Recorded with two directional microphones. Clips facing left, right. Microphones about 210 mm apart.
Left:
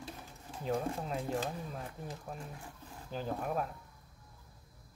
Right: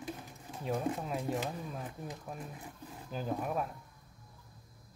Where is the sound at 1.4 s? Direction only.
15° right (ahead or behind).